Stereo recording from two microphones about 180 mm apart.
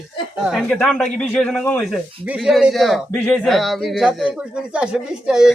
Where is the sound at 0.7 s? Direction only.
5° left (ahead or behind).